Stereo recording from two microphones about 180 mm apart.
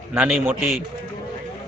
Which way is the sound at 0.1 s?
10° right (ahead or behind).